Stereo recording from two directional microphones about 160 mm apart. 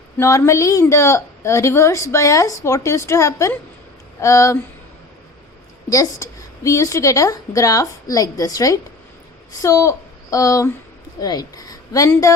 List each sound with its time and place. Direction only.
0.2 s a woman's voice: 20° left (ahead or behind)
5.9 s a woman's voice: 20° left (ahead or behind)